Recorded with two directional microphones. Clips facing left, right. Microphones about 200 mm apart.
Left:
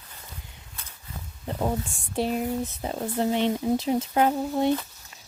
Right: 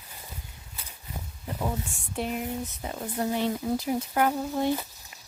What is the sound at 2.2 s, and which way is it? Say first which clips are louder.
Speech: left 5 dB; 30° left (ahead or behind).